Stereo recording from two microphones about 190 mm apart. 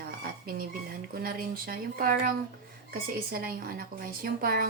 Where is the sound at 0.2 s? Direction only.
50° right (ahead or behind).